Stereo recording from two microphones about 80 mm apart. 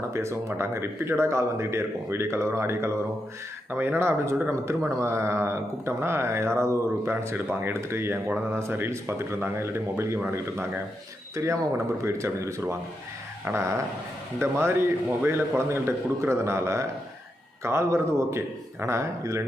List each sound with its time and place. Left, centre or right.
0.1 s a man's voice: right
11.3 s a man's voice: right